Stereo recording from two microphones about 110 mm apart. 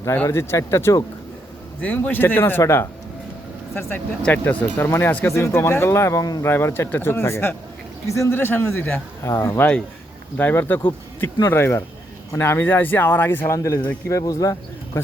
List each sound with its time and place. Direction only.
0.0 s speech: 25° left (ahead or behind)
1.8 s speech: 15° left (ahead or behind); by 6.4 s 30° left (ahead or behind)
6.4 s speech: 20° left (ahead or behind)